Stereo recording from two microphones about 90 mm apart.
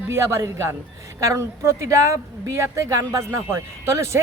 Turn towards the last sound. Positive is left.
turn(degrees=-30)  # may be behind; listen again after turning